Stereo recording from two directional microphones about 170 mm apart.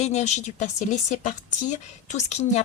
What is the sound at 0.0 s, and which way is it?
Speech, 40° left (ahead or behind).